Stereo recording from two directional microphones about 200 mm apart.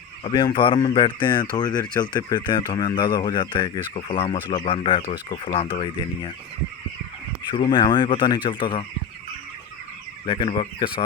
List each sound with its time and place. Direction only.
0.3 s speech: 25° left (ahead or behind)
7.5 s speech: 25° left (ahead or behind)
10.2 s speech: 25° left (ahead or behind)